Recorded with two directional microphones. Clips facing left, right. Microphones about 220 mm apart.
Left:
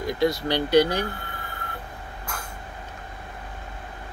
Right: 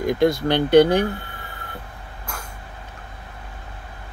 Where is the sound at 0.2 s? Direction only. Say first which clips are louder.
Right 3 dB; 55° right (ahead or behind).